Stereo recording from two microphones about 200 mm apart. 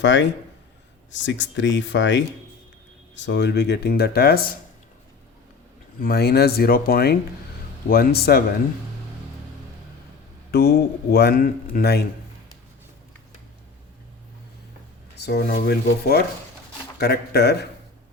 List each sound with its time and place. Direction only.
0.0 s a man's voice: 65° left (ahead or behind)
6.0 s a man's voice: 50° left (ahead or behind)
10.5 s a man's voice: 50° left (ahead or behind)
15.2 s a man's voice: 55° left (ahead or behind)